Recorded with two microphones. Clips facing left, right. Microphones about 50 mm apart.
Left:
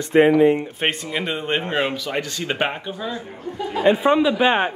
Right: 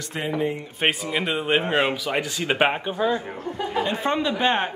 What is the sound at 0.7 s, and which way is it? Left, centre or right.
Speech, centre.